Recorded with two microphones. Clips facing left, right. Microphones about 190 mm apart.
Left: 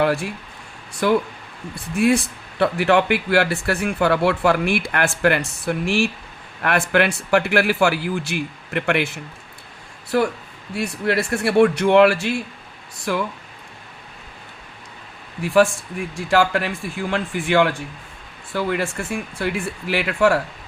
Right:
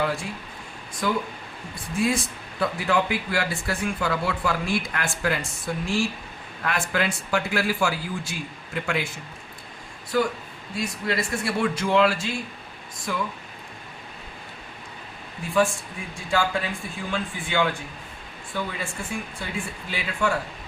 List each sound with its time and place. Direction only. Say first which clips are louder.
0.0 s a sound: left 7 dB; 70° left (ahead or behind)
1.0 s a man's voice: left 7 dB; 70° left (ahead or behind)
10.8 s a man's voice: left 6 dB; 65° left (ahead or behind)
15.4 s a man's voice: left 6 dB; 80° left